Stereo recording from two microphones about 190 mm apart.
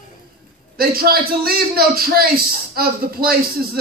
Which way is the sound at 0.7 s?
55° right (ahead or behind).